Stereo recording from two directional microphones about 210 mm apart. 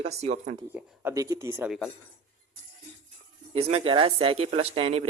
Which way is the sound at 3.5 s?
30° right (ahead or behind).